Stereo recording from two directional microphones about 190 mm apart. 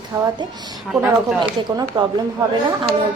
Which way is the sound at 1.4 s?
20° right (ahead or behind).